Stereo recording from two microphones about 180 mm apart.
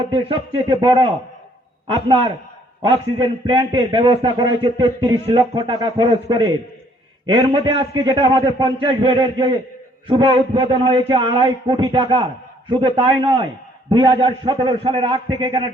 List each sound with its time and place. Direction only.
0.1 s a man's voice: 30° right (ahead or behind)
3.4 s a man's voice: 30° right (ahead or behind)